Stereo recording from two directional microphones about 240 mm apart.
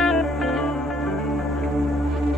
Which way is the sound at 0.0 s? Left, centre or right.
Centre.